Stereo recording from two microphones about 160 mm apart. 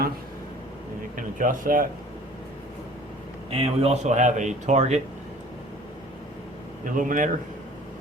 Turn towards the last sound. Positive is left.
turn(degrees=-55)  # may be behind; listen again after turning